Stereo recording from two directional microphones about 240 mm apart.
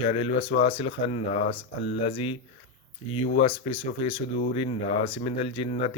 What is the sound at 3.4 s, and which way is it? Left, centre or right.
Speech, left.